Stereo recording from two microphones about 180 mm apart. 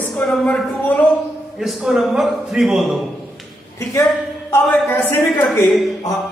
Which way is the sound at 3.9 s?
15° left (ahead or behind).